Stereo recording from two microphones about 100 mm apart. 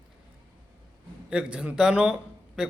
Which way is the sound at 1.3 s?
10° right (ahead or behind).